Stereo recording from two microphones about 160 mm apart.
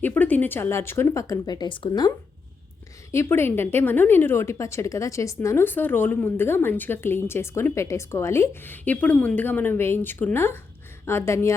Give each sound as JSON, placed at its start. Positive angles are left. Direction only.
{"t": 0.0, "sound": "a woman's voice", "side_deg": 10}